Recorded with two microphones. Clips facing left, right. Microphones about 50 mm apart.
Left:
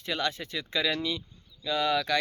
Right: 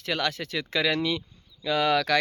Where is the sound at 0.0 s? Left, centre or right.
Right.